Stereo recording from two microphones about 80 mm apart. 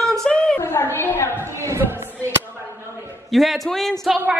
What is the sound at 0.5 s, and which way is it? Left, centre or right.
Speech, left.